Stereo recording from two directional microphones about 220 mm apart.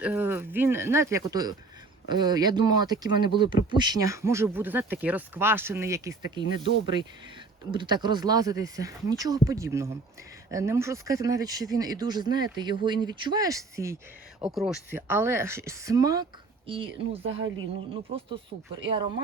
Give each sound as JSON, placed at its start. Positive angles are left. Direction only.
{"t": 0.0, "sound": "speech", "side_deg": -5}
{"t": 7.7, "sound": "speech", "side_deg": -20}